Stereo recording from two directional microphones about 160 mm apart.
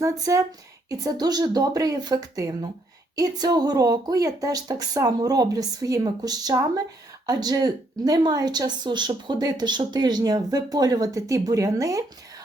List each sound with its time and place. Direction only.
0.0 s speech: 20° right (ahead or behind)